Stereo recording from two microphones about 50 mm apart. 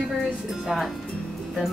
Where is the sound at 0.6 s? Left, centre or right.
Centre.